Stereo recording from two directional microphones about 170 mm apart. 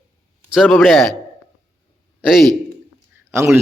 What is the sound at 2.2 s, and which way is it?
Speech, centre (ahead or behind).